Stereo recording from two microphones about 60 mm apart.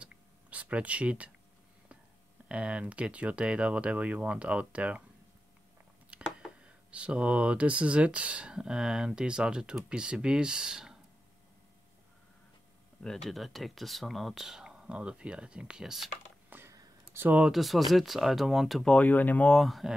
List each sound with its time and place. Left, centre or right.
0.0 s a sound: right
2.4 s speech: centre
6.1 s a sound: centre
6.6 s speech: centre
13.0 s speech: centre
16.5 s a sound: right
17.1 s speech: right
17.5 s speech: centre
18.9 s speech: left
19.6 s speech: centre